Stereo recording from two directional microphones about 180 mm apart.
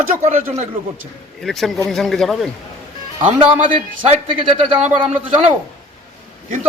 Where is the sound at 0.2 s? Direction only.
40° right (ahead or behind).